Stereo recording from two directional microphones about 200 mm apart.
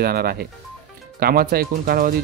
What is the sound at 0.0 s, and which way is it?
Speech, 50° right (ahead or behind).